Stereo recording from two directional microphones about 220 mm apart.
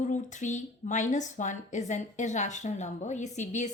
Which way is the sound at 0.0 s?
35° left (ahead or behind).